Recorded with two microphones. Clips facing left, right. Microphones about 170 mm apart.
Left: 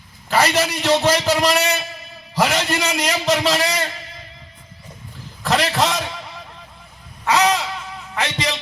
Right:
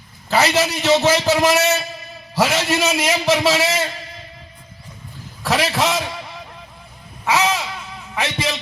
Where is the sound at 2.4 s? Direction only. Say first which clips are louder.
Right 2 dB; 10° right (ahead or behind).